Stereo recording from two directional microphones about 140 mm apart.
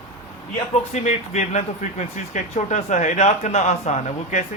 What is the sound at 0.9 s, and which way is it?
Speech, 55° left (ahead or behind).